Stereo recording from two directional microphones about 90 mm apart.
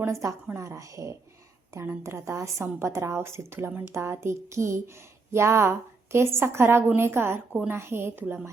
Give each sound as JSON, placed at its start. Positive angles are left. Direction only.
{"t": 0.0, "sound": "a woman's voice", "side_deg": -35}